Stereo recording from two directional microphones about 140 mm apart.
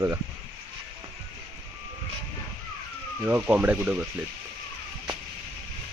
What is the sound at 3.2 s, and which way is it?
Speech, 15° right (ahead or behind).